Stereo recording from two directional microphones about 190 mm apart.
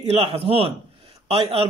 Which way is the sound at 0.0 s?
30° right (ahead or behind).